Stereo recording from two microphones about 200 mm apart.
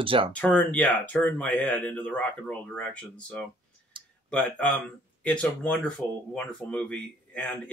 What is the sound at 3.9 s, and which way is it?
Clicking, 25° right (ahead or behind).